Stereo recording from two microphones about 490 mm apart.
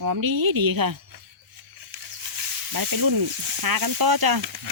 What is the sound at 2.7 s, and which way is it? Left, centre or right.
Speech, right.